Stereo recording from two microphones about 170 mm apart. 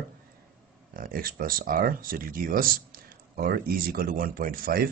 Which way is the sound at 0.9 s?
55° right (ahead or behind).